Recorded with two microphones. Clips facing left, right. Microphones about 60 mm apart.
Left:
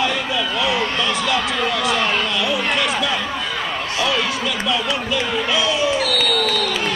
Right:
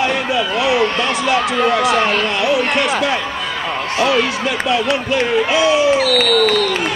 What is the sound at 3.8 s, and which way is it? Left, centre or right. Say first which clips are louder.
Speech: right 6 dB; right.